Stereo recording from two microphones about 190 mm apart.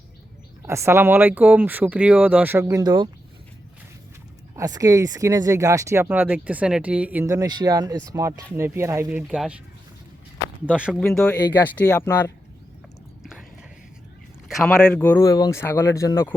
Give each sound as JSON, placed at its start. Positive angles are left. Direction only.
{"t": 0.7, "sound": "speech", "side_deg": -15}
{"t": 4.5, "sound": "speech", "side_deg": -20}
{"t": 10.8, "sound": "speech", "side_deg": 0}
{"t": 14.5, "sound": "speech", "side_deg": 5}